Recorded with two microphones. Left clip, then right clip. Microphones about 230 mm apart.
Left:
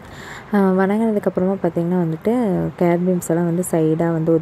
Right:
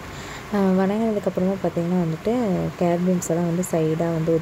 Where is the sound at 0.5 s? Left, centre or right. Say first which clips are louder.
Left 4 dB; centre.